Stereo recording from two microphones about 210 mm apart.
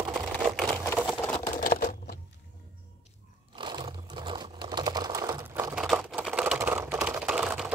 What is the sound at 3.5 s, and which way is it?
Sewing machine, 20° right (ahead or behind).